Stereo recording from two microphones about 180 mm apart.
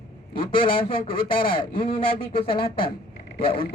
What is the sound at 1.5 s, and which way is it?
Speech, 30° left (ahead or behind).